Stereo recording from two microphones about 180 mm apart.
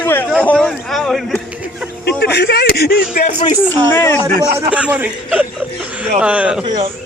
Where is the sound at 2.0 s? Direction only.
65° left (ahead or behind).